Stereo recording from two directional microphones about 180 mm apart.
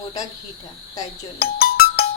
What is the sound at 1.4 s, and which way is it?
Music, 55° left (ahead or behind).